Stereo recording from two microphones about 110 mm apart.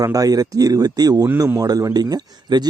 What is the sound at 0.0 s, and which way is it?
Speech, 35° right (ahead or behind).